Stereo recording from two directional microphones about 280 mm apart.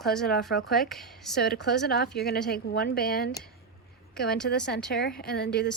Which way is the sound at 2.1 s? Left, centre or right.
Left.